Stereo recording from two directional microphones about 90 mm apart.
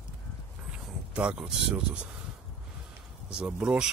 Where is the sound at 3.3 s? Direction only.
10° right (ahead or behind).